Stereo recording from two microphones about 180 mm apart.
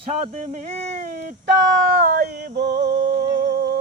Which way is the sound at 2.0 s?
60° right (ahead or behind).